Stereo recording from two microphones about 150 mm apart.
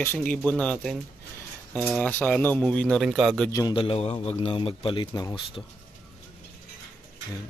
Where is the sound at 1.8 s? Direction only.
5° right (ahead or behind).